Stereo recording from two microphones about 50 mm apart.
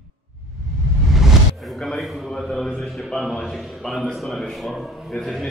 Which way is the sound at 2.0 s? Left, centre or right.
Centre.